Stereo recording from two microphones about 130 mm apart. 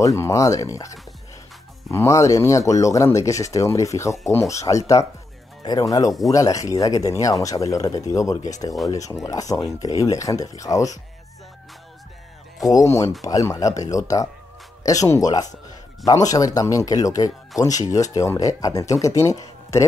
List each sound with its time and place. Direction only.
0.0 s speech: 25° left (ahead or behind)
12.6 s speech: 25° left (ahead or behind)